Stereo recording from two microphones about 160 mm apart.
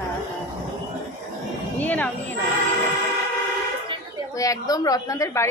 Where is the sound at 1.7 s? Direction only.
10° left (ahead or behind).